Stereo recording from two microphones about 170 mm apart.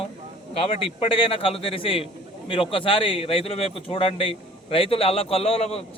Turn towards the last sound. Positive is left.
turn(degrees=35)  # may be behind; listen again after turning